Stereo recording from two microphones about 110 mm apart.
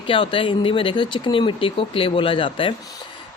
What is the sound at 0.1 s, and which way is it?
A man's voice, 50° left (ahead or behind).